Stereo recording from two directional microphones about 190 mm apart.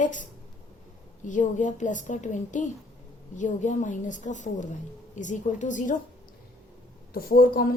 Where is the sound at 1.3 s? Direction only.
40° left (ahead or behind).